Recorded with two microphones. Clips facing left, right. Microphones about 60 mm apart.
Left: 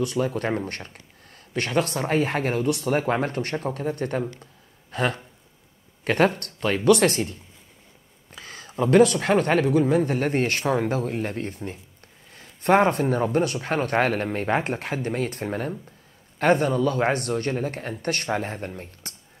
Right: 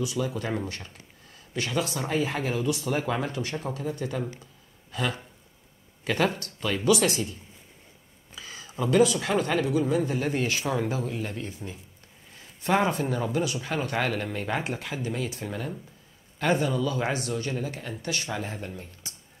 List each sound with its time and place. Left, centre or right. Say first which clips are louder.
0.0 s speech: left 5 dB; left
8.4 s speech: left 5 dB; left